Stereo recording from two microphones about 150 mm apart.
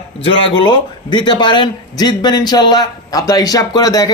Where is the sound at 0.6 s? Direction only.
30° left (ahead or behind).